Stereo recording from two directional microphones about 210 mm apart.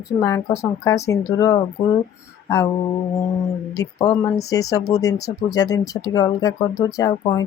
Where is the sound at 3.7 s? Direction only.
20° left (ahead or behind).